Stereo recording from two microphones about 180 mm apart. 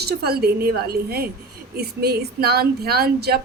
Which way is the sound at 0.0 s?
60° right (ahead or behind).